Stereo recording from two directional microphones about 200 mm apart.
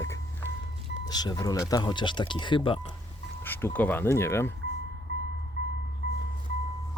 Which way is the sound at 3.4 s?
10° left (ahead or behind).